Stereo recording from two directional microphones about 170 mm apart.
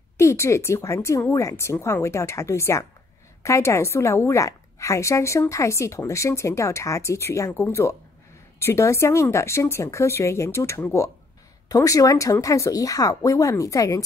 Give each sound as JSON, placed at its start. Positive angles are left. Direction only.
{"t": 0.2, "sound": "a woman's voice", "side_deg": 15}